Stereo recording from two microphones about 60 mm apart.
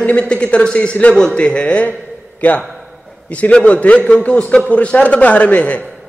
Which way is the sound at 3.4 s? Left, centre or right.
Left.